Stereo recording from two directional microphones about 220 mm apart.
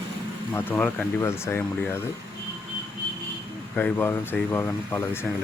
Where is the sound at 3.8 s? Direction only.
10° left (ahead or behind).